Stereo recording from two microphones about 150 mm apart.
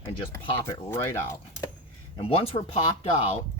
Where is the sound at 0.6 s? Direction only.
15° left (ahead or behind).